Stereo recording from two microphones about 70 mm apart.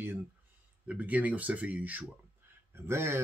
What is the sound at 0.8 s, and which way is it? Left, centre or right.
Speech, right.